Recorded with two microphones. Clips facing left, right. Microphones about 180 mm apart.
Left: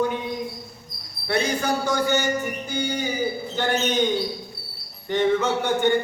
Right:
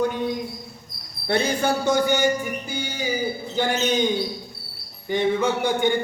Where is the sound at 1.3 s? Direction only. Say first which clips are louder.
Right 2 dB; 30° right (ahead or behind).